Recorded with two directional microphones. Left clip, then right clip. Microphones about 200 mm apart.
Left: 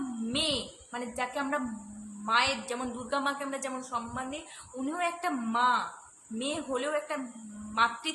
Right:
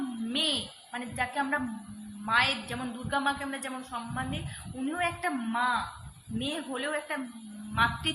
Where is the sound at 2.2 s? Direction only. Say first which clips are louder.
Right 1 dB; 15° left (ahead or behind).